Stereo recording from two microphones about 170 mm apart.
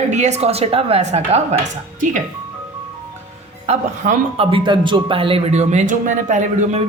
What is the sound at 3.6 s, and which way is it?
A man's voice, 40° right (ahead or behind).